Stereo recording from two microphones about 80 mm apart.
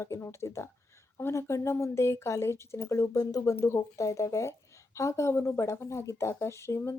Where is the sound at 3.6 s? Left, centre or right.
Left.